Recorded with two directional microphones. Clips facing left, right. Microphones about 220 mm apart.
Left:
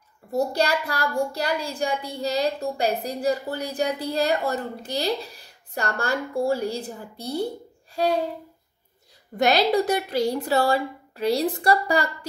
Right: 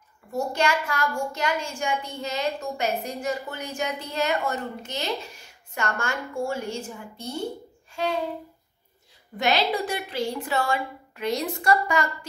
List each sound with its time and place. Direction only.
0.3 s a child's voice: 35° left (ahead or behind)
7.9 s a sound: 35° left (ahead or behind)
9.4 s a child's voice: 40° left (ahead or behind)